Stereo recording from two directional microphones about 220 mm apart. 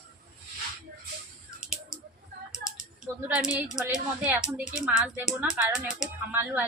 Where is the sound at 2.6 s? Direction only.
Centre (ahead or behind).